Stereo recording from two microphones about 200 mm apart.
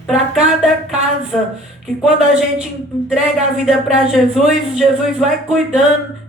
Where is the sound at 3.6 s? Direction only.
Centre (ahead or behind).